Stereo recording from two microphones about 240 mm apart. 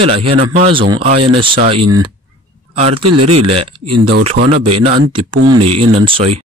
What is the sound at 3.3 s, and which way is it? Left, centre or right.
Speech, right.